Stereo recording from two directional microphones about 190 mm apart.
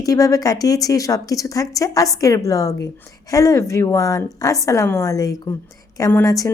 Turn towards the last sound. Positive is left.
turn(degrees=15)  # may be behind; listen again after turning